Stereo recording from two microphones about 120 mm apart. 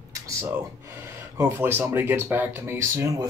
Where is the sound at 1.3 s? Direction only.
20° right (ahead or behind).